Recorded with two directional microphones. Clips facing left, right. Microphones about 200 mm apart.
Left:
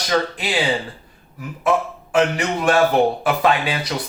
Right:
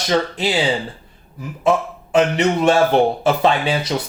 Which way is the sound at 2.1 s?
25° right (ahead or behind).